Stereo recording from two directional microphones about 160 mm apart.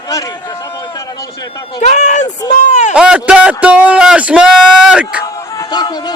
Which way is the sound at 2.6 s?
50° left (ahead or behind).